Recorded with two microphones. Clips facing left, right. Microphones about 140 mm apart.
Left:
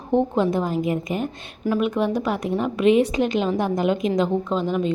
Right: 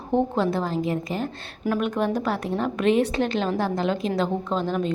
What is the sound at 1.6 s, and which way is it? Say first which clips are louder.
A woman's voice: left 2 dB; 5° left (ahead or behind).